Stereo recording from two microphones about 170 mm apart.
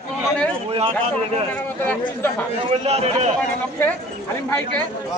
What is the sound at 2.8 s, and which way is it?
Speech, 40° right (ahead or behind).